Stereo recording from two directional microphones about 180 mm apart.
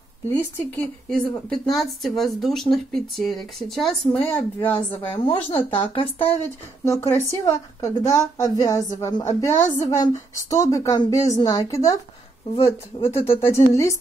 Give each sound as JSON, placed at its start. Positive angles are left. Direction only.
{"t": 0.3, "sound": "a woman's voice", "side_deg": 5}
{"t": 5.1, "sound": "speech", "side_deg": 30}
{"t": 6.4, "sound": "a woman's voice", "side_deg": 15}
{"t": 12.9, "sound": "speech", "side_deg": 30}
{"t": 13.5, "sound": "a woman's voice", "side_deg": 15}